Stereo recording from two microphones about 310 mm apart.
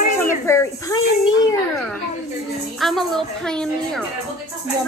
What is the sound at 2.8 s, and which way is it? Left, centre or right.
A woman's voice, centre.